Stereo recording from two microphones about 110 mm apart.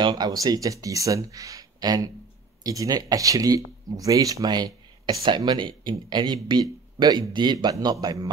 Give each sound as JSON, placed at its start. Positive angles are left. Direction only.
{"t": 0.0, "sound": "speech", "side_deg": -40}